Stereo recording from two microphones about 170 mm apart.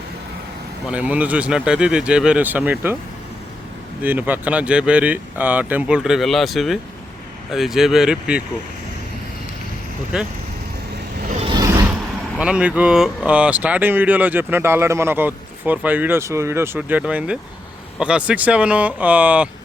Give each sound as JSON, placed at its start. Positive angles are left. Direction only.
{"t": 0.9, "sound": "speech", "side_deg": -10}
{"t": 4.0, "sound": "speech", "side_deg": -10}
{"t": 11.3, "sound": "vehicle", "side_deg": -30}
{"t": 12.4, "sound": "speech", "side_deg": -5}